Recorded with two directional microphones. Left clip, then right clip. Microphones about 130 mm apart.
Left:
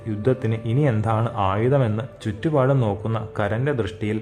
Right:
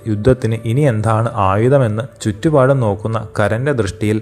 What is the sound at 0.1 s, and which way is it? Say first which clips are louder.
Speech: right 8 dB; 35° right (ahead or behind).